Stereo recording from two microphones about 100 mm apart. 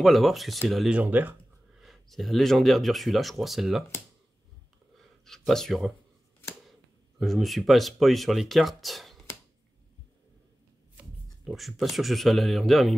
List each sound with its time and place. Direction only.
0.0 s speech: centre (ahead or behind)
0.9 s speech: 15° right (ahead or behind)
1.8 s speech: centre (ahead or behind)
4.9 s a sound: 5° left (ahead or behind)
5.5 s speech: 5° left (ahead or behind)
11.5 s speech: centre (ahead or behind)